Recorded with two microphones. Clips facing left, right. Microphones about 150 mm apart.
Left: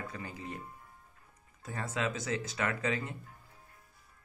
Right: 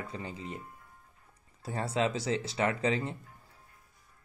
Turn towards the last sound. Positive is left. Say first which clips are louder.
# right 4 dB
turn(degrees=-30)  # may be behind; listen again after turning